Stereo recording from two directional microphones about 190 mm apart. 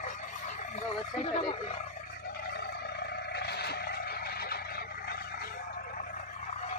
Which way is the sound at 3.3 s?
60° left (ahead or behind).